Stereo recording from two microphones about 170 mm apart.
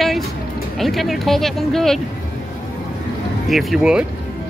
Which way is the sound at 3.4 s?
Centre (ahead or behind).